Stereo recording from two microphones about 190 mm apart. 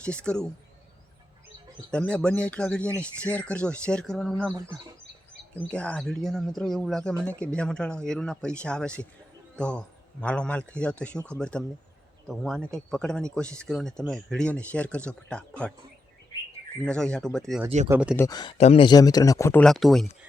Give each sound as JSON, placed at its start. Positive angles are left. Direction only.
{"t": 0.0, "sound": "speech", "side_deg": 5}
{"t": 1.9, "sound": "speech", "side_deg": 5}
{"t": 5.5, "sound": "speech", "side_deg": 5}
{"t": 16.8, "sound": "speech", "side_deg": 5}
{"t": 17.8, "sound": "speech", "side_deg": -10}
{"t": 18.2, "sound": "speech", "side_deg": 20}
{"t": 18.5, "sound": "speech", "side_deg": 35}
{"t": 19.6, "sound": "speech", "side_deg": 0}